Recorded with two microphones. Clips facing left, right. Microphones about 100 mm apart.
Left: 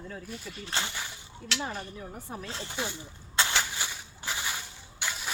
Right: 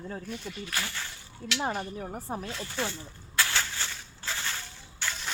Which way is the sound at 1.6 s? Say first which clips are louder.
Right 5 dB; 45° right (ahead or behind).